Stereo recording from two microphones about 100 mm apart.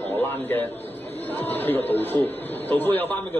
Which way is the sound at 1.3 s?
20° left (ahead or behind).